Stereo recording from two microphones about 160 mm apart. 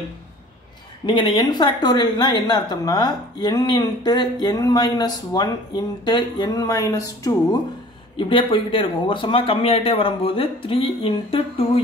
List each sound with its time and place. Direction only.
1.0 s speech: 30° left (ahead or behind)